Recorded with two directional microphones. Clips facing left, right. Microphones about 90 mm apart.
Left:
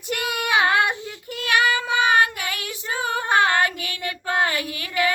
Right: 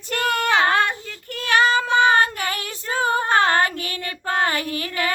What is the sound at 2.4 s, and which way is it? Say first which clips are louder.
Female singing: right 3 dB; 35° right (ahead or behind).